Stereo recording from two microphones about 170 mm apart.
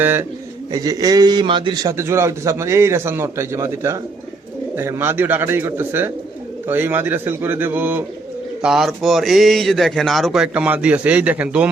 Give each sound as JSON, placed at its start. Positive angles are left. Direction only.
{"t": 0.0, "sound": "a man's voice", "side_deg": -10}